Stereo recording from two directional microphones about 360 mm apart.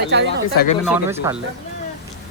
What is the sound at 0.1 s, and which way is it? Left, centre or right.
Speech, right.